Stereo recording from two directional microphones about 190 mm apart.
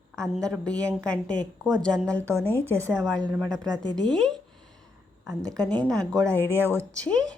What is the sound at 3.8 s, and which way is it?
Speech, 25° right (ahead or behind).